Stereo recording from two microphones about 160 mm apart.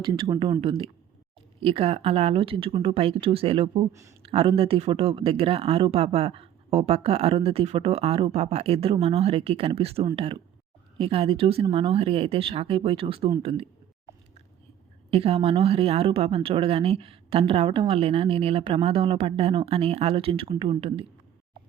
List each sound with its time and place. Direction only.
0.0 s speech: 30° right (ahead or behind)
1.6 s speech: 40° right (ahead or behind)
15.1 s speech: 35° right (ahead or behind)